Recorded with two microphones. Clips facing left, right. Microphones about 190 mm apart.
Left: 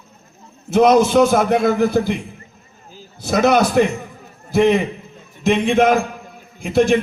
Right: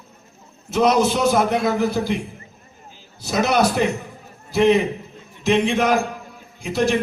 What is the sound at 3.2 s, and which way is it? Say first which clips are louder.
A man's voice: left 4 dB; 50° left (ahead or behind).